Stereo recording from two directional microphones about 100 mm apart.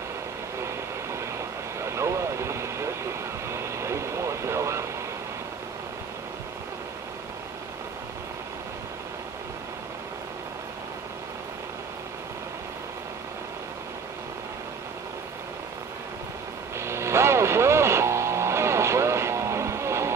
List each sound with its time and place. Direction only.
1.8 s vehicle: 30° right (ahead or behind)
16.7 s vehicle: 25° right (ahead or behind)